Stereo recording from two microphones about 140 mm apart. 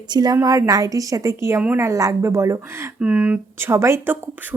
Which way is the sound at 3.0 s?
10° right (ahead or behind).